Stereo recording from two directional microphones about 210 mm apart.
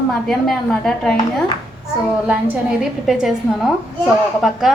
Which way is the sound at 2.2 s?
5° right (ahead or behind).